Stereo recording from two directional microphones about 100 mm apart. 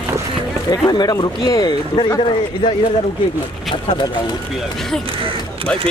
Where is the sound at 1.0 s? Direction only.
40° left (ahead or behind).